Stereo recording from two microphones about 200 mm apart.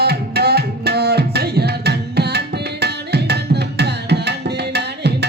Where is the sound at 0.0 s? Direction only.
55° right (ahead or behind).